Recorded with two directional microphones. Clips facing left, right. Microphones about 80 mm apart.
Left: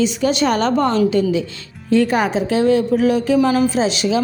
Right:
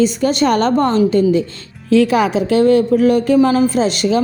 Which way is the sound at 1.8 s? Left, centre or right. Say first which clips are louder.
Right 3 dB; right.